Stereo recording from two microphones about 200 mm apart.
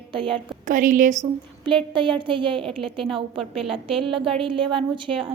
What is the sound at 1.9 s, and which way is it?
Speech, 25° right (ahead or behind).